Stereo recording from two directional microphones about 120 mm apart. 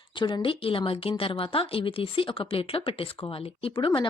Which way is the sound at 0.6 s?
50° left (ahead or behind).